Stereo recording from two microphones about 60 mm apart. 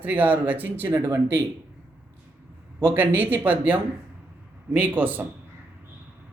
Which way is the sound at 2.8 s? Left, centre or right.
Right.